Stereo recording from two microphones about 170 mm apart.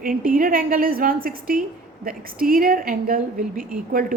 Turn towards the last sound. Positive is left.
turn(degrees=-55)  # may be behind; listen again after turning